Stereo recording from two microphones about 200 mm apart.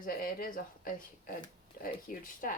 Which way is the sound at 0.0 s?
45° left (ahead or behind).